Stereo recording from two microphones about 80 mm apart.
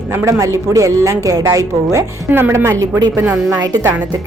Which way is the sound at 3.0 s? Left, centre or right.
Right.